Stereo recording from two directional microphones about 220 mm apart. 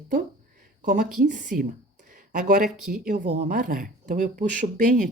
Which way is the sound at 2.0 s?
35° right (ahead or behind).